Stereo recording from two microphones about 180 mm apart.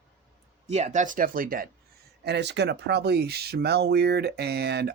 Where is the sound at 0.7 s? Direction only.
40° right (ahead or behind).